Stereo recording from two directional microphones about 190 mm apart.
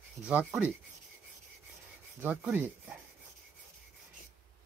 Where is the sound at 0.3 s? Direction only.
10° right (ahead or behind).